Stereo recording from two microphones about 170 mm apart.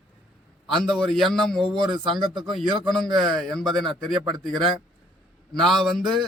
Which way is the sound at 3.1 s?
Centre (ahead or behind).